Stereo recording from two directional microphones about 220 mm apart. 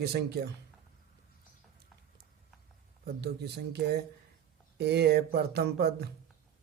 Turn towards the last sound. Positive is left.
turn(degrees=-45)  # may be behind; listen again after turning